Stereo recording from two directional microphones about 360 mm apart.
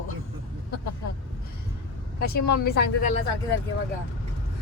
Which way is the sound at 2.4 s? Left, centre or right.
Left.